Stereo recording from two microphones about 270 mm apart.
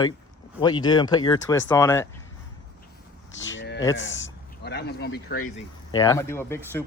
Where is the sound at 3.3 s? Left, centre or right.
Left.